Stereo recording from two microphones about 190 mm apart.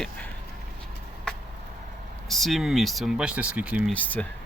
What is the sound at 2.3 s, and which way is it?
Speech, centre (ahead or behind).